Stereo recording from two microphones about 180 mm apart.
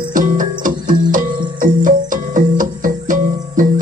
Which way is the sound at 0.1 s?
45° right (ahead or behind).